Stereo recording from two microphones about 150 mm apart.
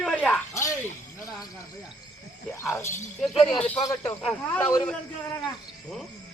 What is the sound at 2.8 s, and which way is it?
Speech, 15° left (ahead or behind).